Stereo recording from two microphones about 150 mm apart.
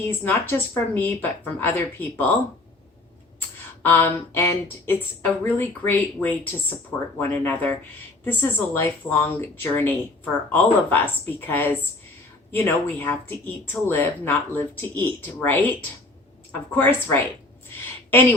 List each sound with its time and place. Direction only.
0.1 s speech: 15° left (ahead or behind)
3.8 s speech: 15° left (ahead or behind)
16.7 s speech: 10° left (ahead or behind)